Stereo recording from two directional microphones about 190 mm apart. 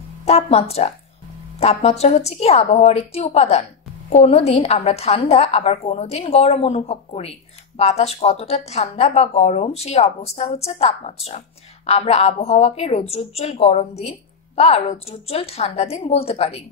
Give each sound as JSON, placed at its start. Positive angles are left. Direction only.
{"t": 0.2, "sound": "a woman's voice", "side_deg": 35}